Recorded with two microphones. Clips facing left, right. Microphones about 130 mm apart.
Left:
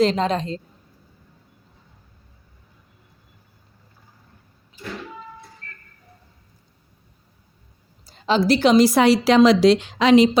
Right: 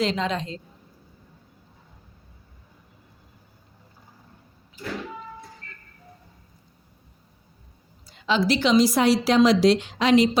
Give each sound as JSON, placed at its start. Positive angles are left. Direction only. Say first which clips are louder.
{"t": 0.0, "sound": "a woman's voice", "louder": "left 6 dB", "side_deg": 40}
{"t": 8.0, "sound": "a woman's voice", "louder": "left 4 dB", "side_deg": 35}